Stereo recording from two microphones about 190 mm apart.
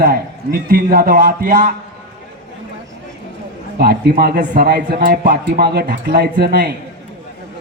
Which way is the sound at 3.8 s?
55° right (ahead or behind).